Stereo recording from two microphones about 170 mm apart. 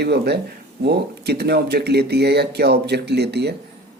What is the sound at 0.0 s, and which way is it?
A man's voice, 75° right (ahead or behind).